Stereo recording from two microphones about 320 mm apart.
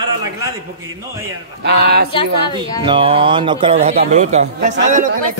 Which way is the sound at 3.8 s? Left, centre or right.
Right.